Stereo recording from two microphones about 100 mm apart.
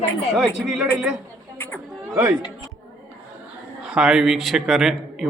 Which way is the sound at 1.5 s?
20° left (ahead or behind).